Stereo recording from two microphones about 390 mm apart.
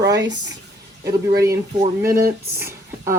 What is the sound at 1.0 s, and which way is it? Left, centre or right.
Speech, centre.